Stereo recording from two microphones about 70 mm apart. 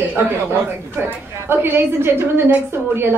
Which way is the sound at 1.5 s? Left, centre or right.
Right.